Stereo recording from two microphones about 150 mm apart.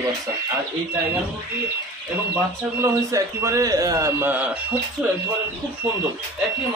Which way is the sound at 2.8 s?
20° right (ahead or behind).